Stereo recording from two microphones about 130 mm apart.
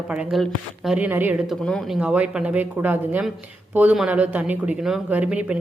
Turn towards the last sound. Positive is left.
turn(degrees=-10)  # may be behind; listen again after turning